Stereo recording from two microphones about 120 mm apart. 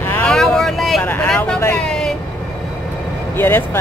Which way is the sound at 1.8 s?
5° left (ahead or behind).